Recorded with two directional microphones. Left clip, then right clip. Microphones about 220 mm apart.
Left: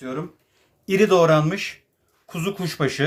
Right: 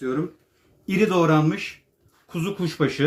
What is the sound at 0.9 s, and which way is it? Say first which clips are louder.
Speech: left 4 dB; 55° left (ahead or behind).